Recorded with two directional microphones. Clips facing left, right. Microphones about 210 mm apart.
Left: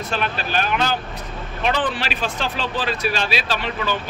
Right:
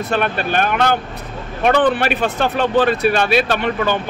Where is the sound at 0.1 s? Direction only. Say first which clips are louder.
Right 5 dB; 55° right (ahead or behind).